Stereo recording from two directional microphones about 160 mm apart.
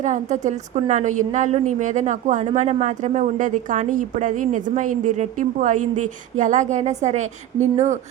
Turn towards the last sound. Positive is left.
turn(degrees=-45)  # may be behind; listen again after turning